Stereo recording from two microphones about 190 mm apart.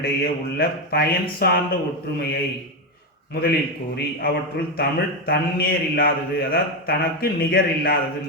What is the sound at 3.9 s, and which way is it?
Speech, 55° left (ahead or behind).